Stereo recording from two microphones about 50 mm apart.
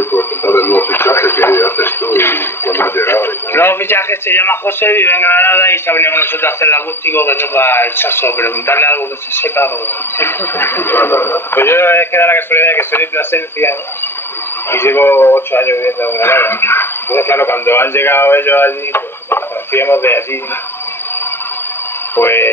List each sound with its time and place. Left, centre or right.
0.1 s speech: left
22.1 s speech: left